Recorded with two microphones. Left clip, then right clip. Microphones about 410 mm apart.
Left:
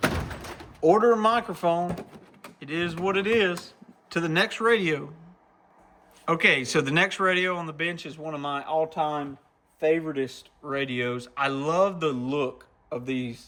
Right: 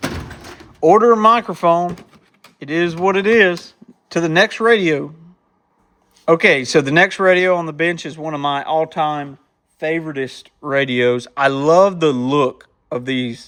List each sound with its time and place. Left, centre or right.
0.8 s speech: centre
6.2 s speech: centre